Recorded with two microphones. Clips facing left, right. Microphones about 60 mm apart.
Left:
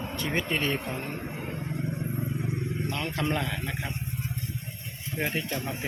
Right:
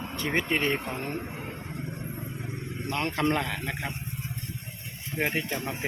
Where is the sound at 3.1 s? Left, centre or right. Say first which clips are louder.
Right 4 dB; right.